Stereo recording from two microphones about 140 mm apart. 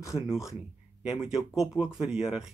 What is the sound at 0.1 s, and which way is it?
Speech, 5° right (ahead or behind).